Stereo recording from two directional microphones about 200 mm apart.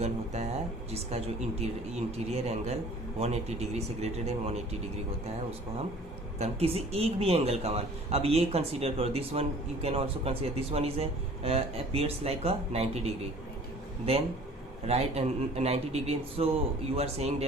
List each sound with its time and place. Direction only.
0.9 s a man's voice: 30° right (ahead or behind)
6.4 s a man's voice: 30° right (ahead or behind)
14.8 s a man's voice: 30° right (ahead or behind)